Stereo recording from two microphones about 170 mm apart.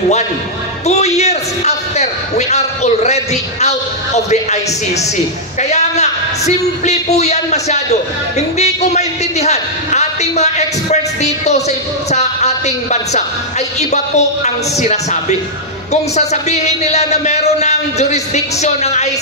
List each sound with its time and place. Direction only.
0.8 s a man's voice: 40° left (ahead or behind)